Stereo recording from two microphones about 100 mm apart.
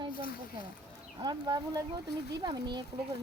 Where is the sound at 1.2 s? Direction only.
45° right (ahead or behind).